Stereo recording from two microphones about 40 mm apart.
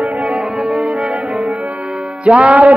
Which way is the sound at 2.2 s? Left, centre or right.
Right.